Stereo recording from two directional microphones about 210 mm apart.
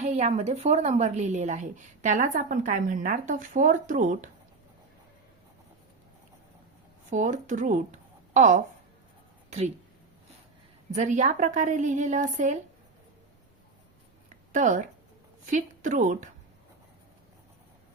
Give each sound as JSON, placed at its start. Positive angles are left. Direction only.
{"t": 0.0, "sound": "a woman's voice", "side_deg": -30}
{"t": 7.1, "sound": "speech", "side_deg": -35}
{"t": 10.9, "sound": "a woman's voice", "side_deg": -35}
{"t": 14.5, "sound": "a woman's voice", "side_deg": -35}